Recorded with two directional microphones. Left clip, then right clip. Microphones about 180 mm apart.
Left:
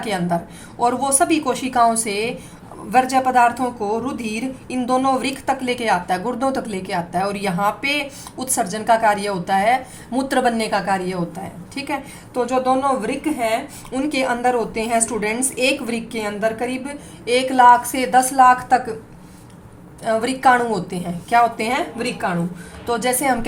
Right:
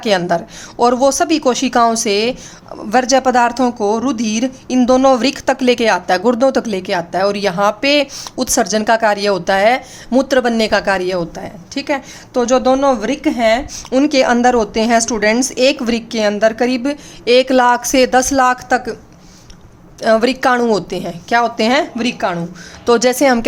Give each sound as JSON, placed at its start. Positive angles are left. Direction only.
{"t": 0.0, "sound": "a woman's voice", "side_deg": -50}
{"t": 20.0, "sound": "a woman's voice", "side_deg": -55}